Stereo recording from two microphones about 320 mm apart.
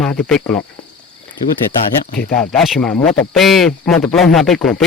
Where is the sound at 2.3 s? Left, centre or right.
Centre.